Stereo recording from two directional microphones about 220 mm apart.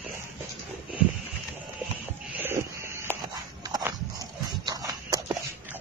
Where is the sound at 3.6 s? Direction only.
15° right (ahead or behind).